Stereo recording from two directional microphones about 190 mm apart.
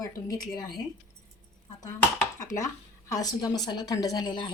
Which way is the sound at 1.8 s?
15° left (ahead or behind).